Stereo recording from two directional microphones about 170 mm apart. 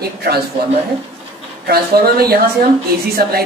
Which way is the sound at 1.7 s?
65° right (ahead or behind).